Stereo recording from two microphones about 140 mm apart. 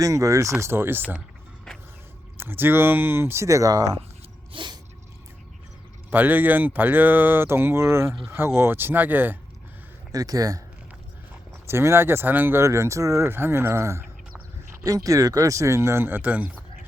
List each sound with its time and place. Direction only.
0.0 s speech: 20° right (ahead or behind)
2.4 s speech: 15° right (ahead or behind)
4.5 s sneeze: 35° right (ahead or behind)
6.1 s speech: 15° right (ahead or behind)
10.1 s speech: 25° right (ahead or behind)
11.7 s speech: 15° right (ahead or behind)